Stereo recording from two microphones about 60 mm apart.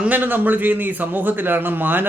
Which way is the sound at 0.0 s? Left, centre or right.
Right.